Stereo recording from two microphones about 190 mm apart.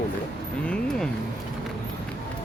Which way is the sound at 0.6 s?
5° left (ahead or behind).